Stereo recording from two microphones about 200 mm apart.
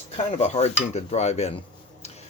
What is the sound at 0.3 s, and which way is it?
Speech, 30° left (ahead or behind).